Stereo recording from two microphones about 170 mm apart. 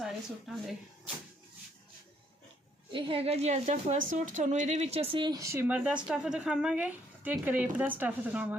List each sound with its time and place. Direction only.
0.0 s speech: centre (ahead or behind)
2.9 s a woman's voice: 30° right (ahead or behind); by 8.5 s 10° right (ahead or behind)